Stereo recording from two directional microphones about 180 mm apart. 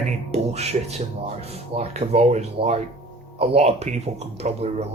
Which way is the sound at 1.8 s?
35° right (ahead or behind).